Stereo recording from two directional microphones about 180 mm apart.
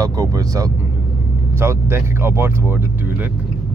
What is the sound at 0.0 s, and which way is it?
Speech, 20° right (ahead or behind).